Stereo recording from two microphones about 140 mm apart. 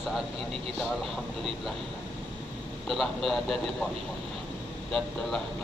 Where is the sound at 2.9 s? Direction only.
Centre (ahead or behind).